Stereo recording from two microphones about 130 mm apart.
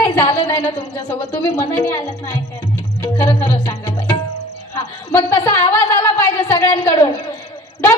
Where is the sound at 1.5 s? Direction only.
35° left (ahead or behind).